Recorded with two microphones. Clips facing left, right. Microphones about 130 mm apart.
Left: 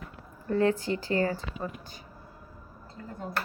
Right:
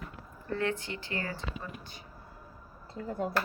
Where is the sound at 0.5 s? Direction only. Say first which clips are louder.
Left 7 dB; 35° left (ahead or behind).